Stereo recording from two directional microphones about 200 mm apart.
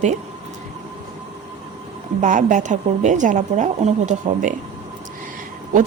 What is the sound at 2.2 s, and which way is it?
Speech, 40° right (ahead or behind).